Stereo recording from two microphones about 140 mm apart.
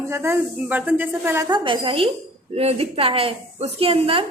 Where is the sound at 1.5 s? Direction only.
35° right (ahead or behind).